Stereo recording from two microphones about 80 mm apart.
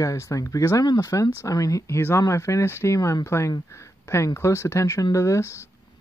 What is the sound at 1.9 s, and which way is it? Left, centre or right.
Speech, left.